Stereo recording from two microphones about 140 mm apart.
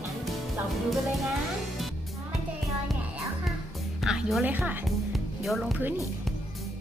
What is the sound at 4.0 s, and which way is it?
Speech, 5° right (ahead or behind).